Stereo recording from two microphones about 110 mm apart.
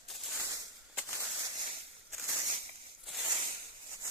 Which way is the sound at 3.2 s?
45° right (ahead or behind).